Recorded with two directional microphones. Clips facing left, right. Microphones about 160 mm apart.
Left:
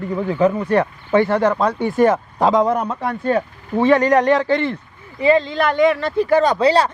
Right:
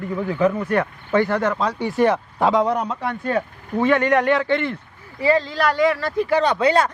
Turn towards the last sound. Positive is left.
turn(degrees=30)  # may be behind; listen again after turning